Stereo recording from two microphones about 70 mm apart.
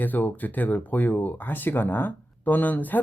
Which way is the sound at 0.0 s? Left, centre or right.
Left.